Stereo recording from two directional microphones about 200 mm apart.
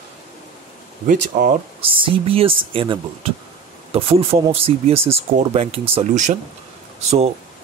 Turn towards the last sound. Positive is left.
turn(degrees=-30)  # may be behind; listen again after turning